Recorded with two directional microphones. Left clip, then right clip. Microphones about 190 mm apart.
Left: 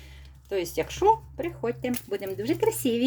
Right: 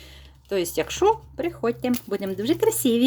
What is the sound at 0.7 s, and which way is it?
Speech, 30° right (ahead or behind).